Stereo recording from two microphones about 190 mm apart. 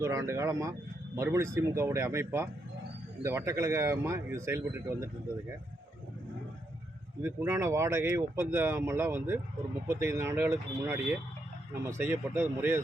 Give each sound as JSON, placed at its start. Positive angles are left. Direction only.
{"t": 0.0, "sound": "speech", "side_deg": -15}
{"t": 7.2, "sound": "speech", "side_deg": -15}